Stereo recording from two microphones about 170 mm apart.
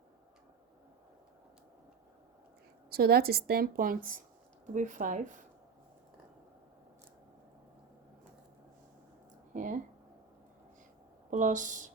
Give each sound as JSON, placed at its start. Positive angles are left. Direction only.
{"t": 2.9, "sound": "a woman's voice", "side_deg": -65}
{"t": 9.5, "sound": "a sound", "side_deg": -50}
{"t": 11.3, "sound": "speech", "side_deg": -50}